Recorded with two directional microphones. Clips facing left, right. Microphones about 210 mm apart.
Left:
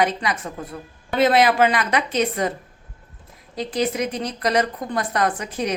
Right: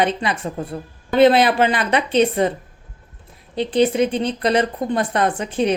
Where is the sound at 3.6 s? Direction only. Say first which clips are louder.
Right 6 dB; 30° right (ahead or behind).